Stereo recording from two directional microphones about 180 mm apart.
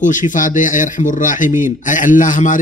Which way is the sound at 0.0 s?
45° left (ahead or behind).